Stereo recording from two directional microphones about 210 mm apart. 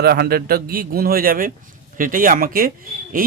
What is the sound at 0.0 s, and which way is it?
Speech, 50° right (ahead or behind).